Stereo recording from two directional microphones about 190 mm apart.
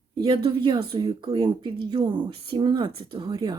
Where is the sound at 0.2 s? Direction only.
20° right (ahead or behind).